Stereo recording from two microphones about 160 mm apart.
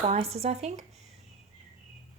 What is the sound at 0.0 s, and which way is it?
Speech, 40° right (ahead or behind).